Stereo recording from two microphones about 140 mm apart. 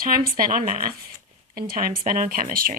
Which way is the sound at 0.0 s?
90° right.